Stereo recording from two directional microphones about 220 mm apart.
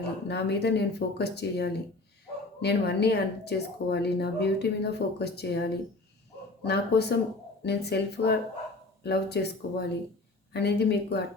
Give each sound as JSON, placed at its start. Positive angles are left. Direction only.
{"t": 0.0, "sound": "speech", "side_deg": 50}